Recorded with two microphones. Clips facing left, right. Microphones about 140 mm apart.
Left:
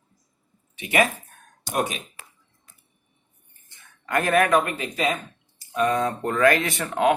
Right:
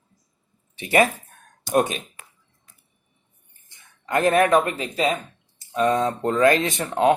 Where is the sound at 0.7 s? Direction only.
35° right (ahead or behind).